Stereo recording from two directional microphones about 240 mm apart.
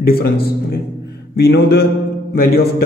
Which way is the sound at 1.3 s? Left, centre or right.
Left.